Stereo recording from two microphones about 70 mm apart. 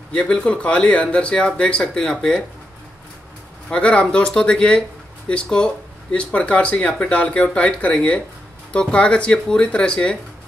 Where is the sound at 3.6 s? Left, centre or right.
Centre.